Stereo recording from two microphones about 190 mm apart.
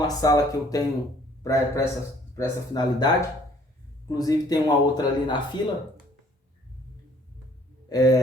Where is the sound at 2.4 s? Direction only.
20° left (ahead or behind).